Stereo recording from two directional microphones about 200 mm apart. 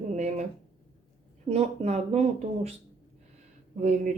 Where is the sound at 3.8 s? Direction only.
40° right (ahead or behind).